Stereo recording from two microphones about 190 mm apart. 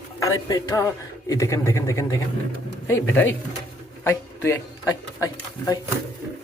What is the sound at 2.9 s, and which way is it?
Speech, 90° left.